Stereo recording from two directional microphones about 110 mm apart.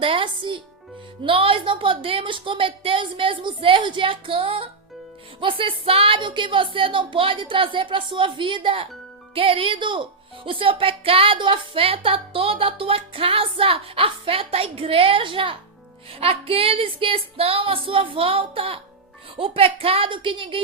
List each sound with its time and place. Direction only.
0.0 s a woman's voice: 50° right (ahead or behind)